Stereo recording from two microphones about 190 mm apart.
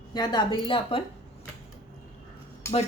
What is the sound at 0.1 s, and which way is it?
Speech, 20° left (ahead or behind).